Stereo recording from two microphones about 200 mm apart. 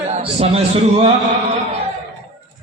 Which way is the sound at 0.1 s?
30° right (ahead or behind).